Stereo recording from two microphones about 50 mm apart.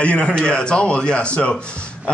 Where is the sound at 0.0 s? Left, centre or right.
Left.